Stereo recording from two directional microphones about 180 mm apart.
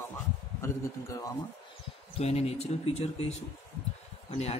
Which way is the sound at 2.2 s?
35° left (ahead or behind).